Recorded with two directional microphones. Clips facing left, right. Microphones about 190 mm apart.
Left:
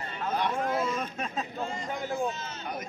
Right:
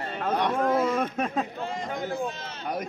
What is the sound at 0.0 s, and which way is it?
Speech, 60° right (ahead or behind).